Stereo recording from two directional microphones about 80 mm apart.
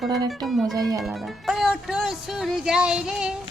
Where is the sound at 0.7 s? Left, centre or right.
Right.